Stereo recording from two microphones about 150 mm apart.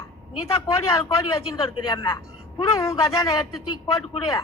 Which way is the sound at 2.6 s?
20° left (ahead or behind).